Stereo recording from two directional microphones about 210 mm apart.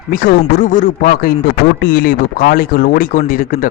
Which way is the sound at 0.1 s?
40° left (ahead or behind).